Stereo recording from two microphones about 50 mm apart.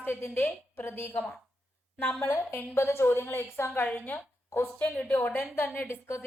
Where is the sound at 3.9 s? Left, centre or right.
Left.